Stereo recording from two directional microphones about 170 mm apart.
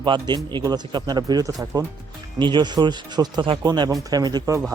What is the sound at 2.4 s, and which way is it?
A man's voice, 25° right (ahead or behind).